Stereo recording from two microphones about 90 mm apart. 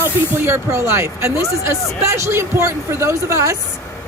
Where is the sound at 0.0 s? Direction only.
30° right (ahead or behind).